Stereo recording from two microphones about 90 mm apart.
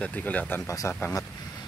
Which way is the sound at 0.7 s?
35° left (ahead or behind).